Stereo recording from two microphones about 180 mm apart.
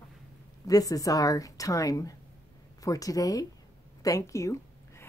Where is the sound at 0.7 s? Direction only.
20° left (ahead or behind).